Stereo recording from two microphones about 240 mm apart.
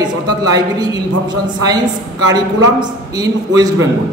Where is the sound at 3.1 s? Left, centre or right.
Centre.